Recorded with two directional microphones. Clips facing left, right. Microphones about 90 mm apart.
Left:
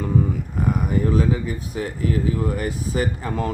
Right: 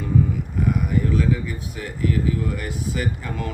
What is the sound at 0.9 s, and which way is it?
Speech, 40° left (ahead or behind).